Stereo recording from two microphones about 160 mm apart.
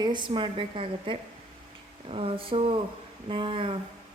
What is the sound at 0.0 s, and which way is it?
A woman's voice, 30° right (ahead or behind).